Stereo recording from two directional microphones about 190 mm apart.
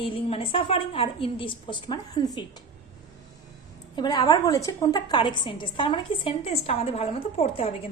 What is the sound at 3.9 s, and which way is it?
A woman's voice, 25° left (ahead or behind).